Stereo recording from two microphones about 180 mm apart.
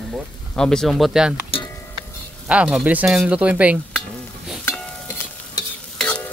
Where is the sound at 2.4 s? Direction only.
5° right (ahead or behind).